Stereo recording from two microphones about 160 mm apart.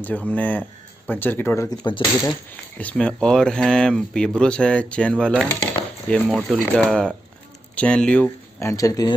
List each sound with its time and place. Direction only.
0.0 s speech: 10° left (ahead or behind)
1.7 s speech: 25° left (ahead or behind)
2.8 s speech: 10° left (ahead or behind)